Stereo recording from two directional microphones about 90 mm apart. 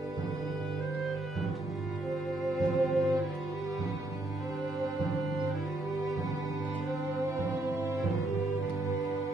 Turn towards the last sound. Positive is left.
turn(degrees=-35)  # may be behind; listen again after turning